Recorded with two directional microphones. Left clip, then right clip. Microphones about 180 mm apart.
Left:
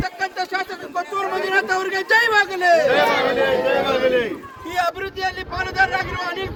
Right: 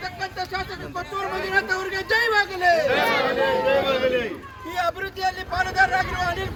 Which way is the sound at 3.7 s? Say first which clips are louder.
Left 3 dB; 40° left (ahead or behind).